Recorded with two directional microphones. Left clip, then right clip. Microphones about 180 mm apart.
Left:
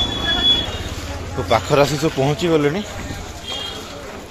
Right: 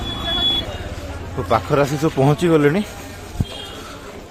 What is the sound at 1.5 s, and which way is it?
Speech, 25° right (ahead or behind).